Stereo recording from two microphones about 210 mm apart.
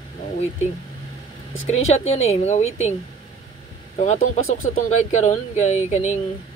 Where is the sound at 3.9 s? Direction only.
35° left (ahead or behind).